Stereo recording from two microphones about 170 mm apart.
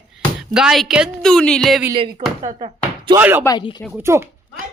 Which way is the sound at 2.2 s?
35° right (ahead or behind).